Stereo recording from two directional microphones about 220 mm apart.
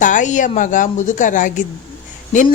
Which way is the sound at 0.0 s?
35° left (ahead or behind).